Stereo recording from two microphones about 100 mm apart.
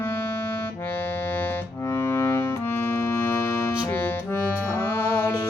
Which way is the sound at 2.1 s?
25° left (ahead or behind).